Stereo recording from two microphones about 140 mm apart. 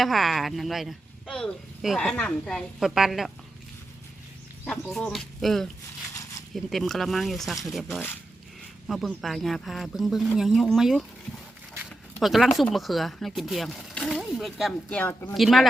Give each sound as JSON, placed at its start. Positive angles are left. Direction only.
{"t": 0.0, "sound": "speech", "side_deg": 0}
{"t": 4.6, "sound": "speech", "side_deg": 5}
{"t": 12.2, "sound": "speech", "side_deg": 0}
{"t": 14.9, "sound": "speech", "side_deg": 15}
{"t": 15.4, "sound": "speech", "side_deg": 0}